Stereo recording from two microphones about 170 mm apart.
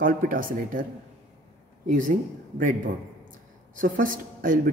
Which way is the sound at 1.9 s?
50° right (ahead or behind).